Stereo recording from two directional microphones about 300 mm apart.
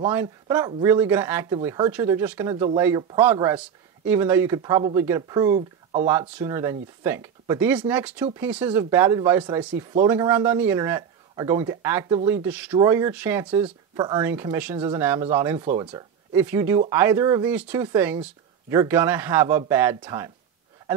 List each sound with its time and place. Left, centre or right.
0.0 s speech: centre
5.6 s a sound: right
6.0 s speech: centre